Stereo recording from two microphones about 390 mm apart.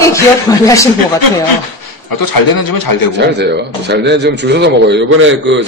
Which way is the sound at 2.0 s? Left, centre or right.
Left.